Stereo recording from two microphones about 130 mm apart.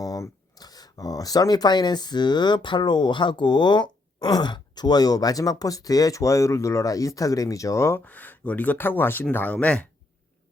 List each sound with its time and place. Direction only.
0.0 s speech: 25° left (ahead or behind); by 9.9 s 10° left (ahead or behind)